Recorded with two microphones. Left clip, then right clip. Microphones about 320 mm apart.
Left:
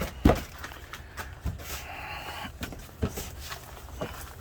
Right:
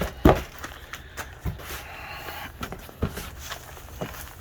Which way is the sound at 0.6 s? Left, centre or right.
Right.